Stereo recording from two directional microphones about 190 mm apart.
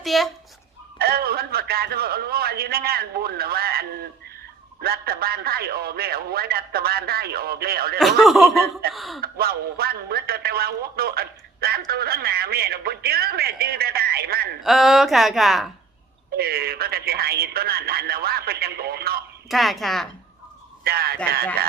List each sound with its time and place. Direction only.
0.0 s a child's voice: centre (ahead or behind)
0.9 s a man's voice: 55° right (ahead or behind)
7.9 s a woman's voice: centre (ahead or behind)
9.2 s a man's voice: 55° right (ahead or behind)
14.6 s a woman's voice: centre (ahead or behind)
16.4 s a man's voice: 55° right (ahead or behind)
19.5 s a woman's voice: centre (ahead or behind)
20.8 s a man's voice: 55° right (ahead or behind)